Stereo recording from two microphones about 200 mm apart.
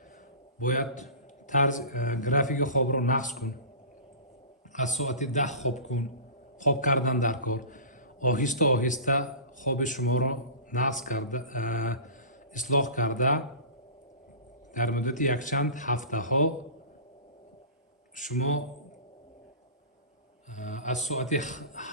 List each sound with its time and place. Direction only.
0.6 s a man's voice: 40° left (ahead or behind)
4.7 s a man's voice: 35° left (ahead or behind)
14.7 s a man's voice: 40° left (ahead or behind)
20.6 s a man's voice: 40° left (ahead or behind)